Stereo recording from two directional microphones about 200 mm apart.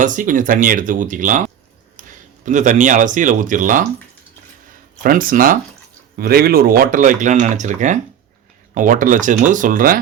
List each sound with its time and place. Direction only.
0.0 s speech: 40° right (ahead or behind)
5.0 s speech: 45° right (ahead or behind)